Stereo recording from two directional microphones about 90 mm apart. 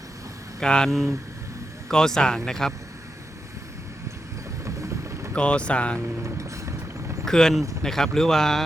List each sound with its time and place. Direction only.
0.6 s speech: 10° left (ahead or behind)
4.6 s vehicle: 35° right (ahead or behind)
5.3 s speech: 10° left (ahead or behind)
6.2 s a sound: 35° right (ahead or behind)
7.3 s speech: 5° left (ahead or behind)